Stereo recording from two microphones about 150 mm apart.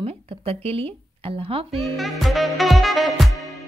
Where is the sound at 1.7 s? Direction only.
Centre (ahead or behind).